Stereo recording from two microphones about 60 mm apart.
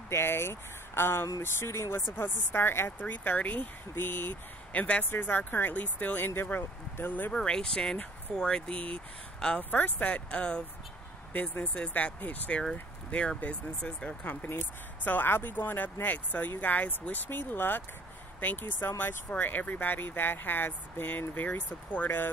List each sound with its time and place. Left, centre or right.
0.1 s speech: left
2.1 s speech: left
3.1 s speech: left
7.3 s speech: centre
9.6 s speech: left
11.3 s speech: left
15.0 s speech: left